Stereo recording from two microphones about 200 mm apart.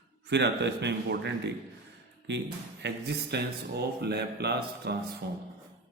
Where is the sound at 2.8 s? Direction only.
55° right (ahead or behind).